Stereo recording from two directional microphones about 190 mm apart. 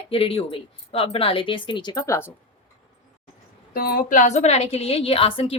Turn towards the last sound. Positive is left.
turn(degrees=30)  # may be behind; listen again after turning